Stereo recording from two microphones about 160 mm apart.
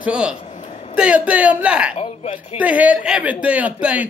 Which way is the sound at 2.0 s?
40° left (ahead or behind).